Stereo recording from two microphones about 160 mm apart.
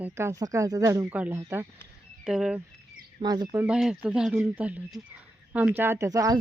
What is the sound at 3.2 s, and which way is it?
Speech, 25° right (ahead or behind).